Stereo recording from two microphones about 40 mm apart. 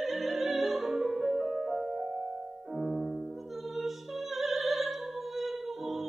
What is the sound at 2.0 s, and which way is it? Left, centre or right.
Music, right.